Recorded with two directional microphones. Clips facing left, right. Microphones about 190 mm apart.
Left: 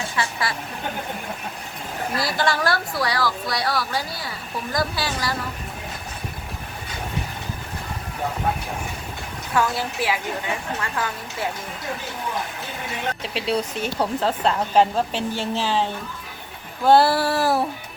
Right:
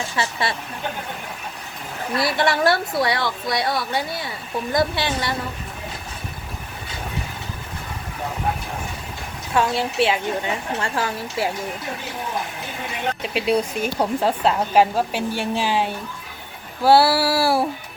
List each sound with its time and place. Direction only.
0.2 s a sound: 25° right (ahead or behind)
2.1 s a woman's voice: 25° right (ahead or behind)
9.6 s a woman's voice: 25° right (ahead or behind)
13.3 s a woman's voice: 10° right (ahead or behind)